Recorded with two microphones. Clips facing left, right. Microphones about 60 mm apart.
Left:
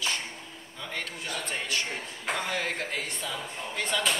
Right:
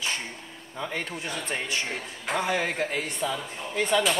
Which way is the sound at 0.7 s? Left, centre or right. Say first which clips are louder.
Right 5 dB; right.